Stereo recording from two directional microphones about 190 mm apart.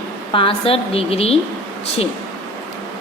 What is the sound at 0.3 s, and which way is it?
A woman's voice, 30° left (ahead or behind).